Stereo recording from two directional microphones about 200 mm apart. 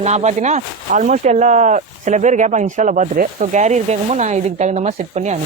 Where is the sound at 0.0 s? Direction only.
35° right (ahead or behind).